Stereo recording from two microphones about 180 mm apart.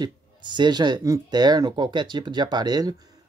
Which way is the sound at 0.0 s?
25° right (ahead or behind).